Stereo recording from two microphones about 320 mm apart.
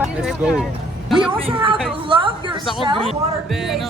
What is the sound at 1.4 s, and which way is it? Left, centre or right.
Speech, centre.